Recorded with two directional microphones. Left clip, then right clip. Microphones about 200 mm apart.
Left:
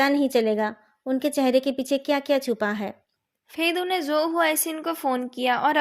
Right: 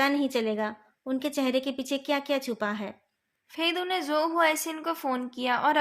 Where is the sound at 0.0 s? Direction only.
30° left (ahead or behind).